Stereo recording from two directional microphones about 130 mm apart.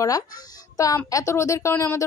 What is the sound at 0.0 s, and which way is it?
Speech, 30° left (ahead or behind).